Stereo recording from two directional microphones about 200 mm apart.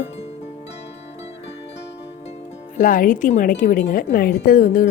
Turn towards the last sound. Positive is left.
turn(degrees=45)  # may be behind; listen again after turning